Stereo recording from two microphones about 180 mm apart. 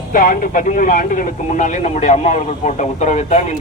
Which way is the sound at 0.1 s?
50° left (ahead or behind).